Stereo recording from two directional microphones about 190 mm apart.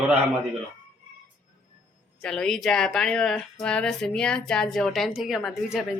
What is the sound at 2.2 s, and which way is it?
Speech, 5° left (ahead or behind).